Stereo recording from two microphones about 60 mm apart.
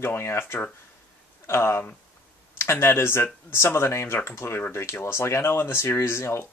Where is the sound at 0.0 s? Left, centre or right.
Left.